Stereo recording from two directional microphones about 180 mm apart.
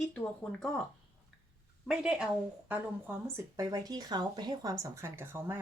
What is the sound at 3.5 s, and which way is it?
Speech, 20° right (ahead or behind).